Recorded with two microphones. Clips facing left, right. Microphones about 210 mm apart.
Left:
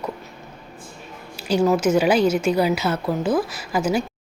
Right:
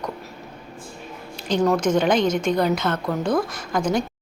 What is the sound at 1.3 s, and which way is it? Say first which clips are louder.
A woman's voice: left 1 dB; 5° left (ahead or behind).